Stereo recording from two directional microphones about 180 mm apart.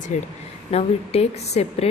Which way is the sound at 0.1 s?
40° left (ahead or behind).